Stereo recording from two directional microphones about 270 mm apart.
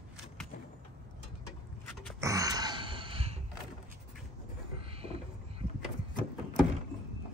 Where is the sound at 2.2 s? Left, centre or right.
Centre.